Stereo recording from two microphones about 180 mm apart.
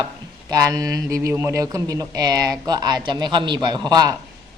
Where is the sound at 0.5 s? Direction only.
20° right (ahead or behind).